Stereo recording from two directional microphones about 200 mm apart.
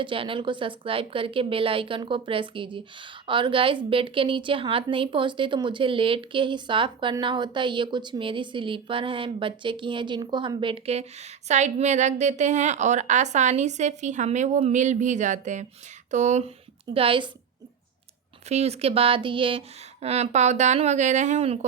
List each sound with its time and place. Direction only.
0.0 s a woman's voice: 25° right (ahead or behind)
18.4 s speech: 30° right (ahead or behind)